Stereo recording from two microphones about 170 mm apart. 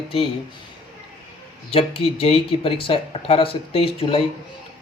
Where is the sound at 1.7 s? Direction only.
35° left (ahead or behind).